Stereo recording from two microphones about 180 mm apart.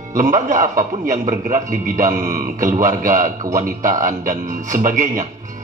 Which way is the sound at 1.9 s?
15° right (ahead or behind).